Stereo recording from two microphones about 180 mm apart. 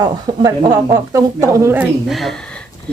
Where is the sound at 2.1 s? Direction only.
Centre (ahead or behind).